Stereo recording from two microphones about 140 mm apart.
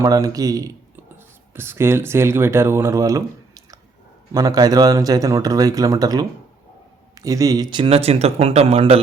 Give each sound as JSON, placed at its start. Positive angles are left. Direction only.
{"t": 0.0, "sound": "speech", "side_deg": -25}